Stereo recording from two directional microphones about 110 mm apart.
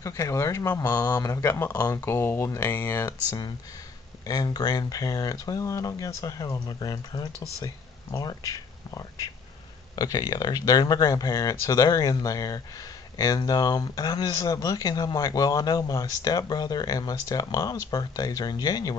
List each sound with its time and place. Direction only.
0.0 s speech: 30° left (ahead or behind)
3.3 s speech: 40° left (ahead or behind)